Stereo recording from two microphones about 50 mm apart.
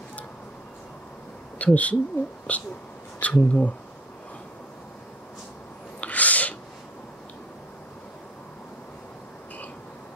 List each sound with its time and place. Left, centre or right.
1.6 s speech: left
5.9 s sneeze: left